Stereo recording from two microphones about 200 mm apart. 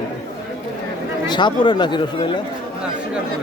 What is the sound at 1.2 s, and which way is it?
Speech, 20° left (ahead or behind).